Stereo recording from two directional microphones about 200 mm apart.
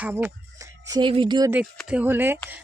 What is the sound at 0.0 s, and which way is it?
Speech, 10° right (ahead or behind).